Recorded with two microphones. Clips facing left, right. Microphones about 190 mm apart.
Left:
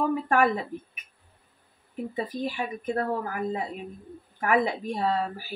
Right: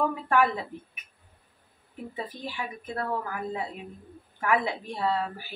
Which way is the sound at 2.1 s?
40° left (ahead or behind).